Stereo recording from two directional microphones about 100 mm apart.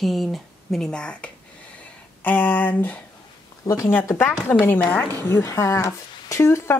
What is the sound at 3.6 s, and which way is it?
Speech, 35° left (ahead or behind).